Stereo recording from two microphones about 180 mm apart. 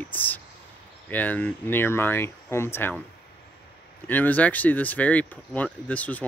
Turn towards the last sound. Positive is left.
turn(degrees=10)  # may be behind; listen again after turning